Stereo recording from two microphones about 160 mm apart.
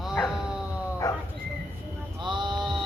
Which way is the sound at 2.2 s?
30° right (ahead or behind).